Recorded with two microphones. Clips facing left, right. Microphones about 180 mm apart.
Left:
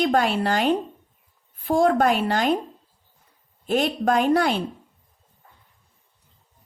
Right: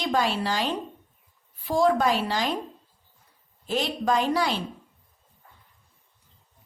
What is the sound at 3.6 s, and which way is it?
Speech, 55° left (ahead or behind).